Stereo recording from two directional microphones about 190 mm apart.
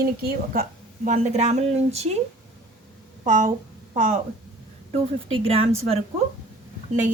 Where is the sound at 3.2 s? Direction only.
45° right (ahead or behind).